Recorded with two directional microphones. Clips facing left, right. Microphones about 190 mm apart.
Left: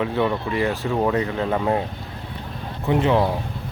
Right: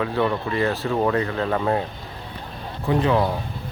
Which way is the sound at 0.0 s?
15° left (ahead or behind).